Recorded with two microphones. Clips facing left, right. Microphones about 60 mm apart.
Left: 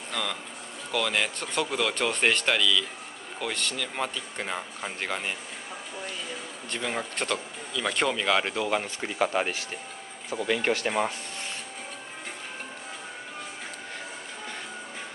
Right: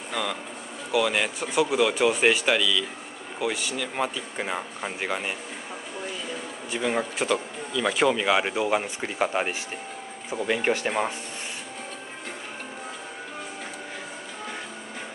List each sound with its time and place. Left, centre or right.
0.1 s speech: centre
6.7 s speech: centre